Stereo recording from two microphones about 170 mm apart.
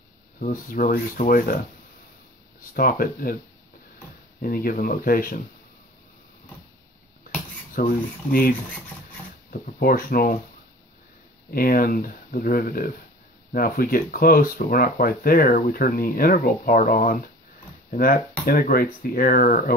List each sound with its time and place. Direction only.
0.4 s speech: 50° left (ahead or behind)
2.6 s speech: 60° left (ahead or behind)
4.4 s speech: 60° left (ahead or behind)
7.7 s speech: 60° left (ahead or behind)
9.5 s speech: 55° left (ahead or behind)
11.5 s speech: 60° left (ahead or behind)